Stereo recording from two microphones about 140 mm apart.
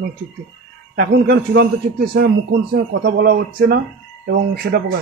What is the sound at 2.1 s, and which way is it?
A man's voice, 90° right.